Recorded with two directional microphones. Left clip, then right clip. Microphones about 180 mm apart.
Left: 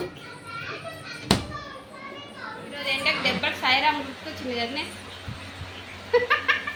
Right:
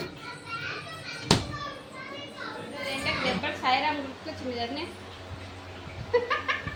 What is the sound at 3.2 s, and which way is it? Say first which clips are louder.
Music: left 4 dB; 35° left (ahead or behind).